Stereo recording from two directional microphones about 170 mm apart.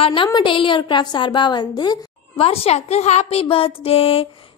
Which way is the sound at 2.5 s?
40° left (ahead or behind).